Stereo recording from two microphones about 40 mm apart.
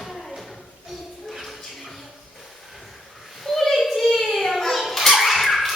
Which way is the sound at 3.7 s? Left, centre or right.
Centre.